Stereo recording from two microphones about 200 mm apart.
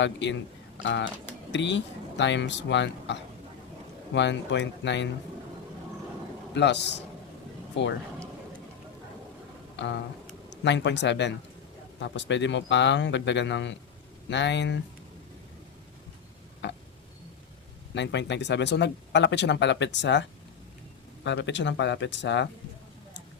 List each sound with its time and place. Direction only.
0.0 s speech: 65° left (ahead or behind)
6.5 s speech: 60° left (ahead or behind)
9.7 s speech: 60° left (ahead or behind)
16.6 s tick-tock: 65° left (ahead or behind)
17.9 s speech: 60° left (ahead or behind)
21.2 s speech: 60° left (ahead or behind)